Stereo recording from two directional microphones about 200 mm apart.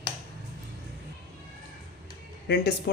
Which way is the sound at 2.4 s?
55° left (ahead or behind).